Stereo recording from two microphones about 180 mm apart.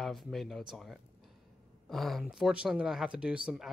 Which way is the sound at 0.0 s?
Centre (ahead or behind).